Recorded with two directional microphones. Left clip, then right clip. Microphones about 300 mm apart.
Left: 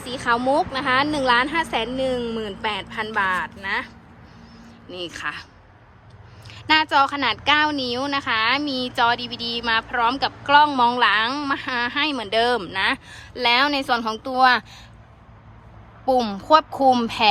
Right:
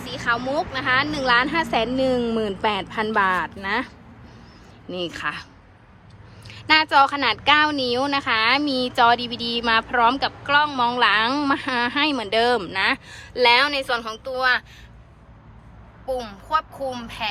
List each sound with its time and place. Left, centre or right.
0.0 s a woman's voice: centre
6.5 s a woman's voice: centre
16.0 s a woman's voice: centre